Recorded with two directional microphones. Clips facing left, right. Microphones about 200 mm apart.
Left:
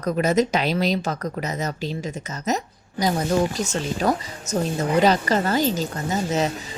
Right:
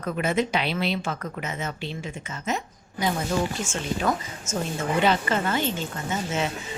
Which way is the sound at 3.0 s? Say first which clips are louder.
Left 4 dB; 40° left (ahead or behind).